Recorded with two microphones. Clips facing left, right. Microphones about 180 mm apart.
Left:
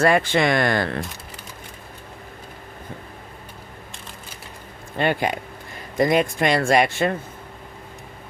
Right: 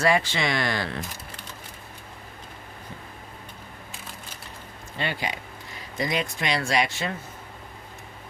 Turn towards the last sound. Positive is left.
turn(degrees=55)  # may be behind; listen again after turning